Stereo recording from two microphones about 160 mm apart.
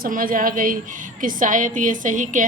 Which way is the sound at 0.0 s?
60° right (ahead or behind).